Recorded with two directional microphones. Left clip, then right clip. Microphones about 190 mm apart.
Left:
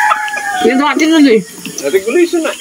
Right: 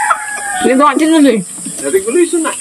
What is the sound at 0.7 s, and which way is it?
Speech, 40° right (ahead or behind).